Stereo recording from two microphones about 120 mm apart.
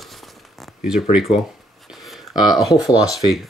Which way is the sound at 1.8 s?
Centre (ahead or behind).